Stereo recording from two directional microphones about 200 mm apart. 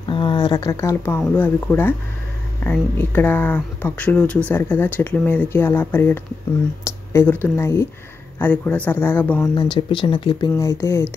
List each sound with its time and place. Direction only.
0.1 s speech: 25° left (ahead or behind)
9.6 s speech: 25° left (ahead or behind)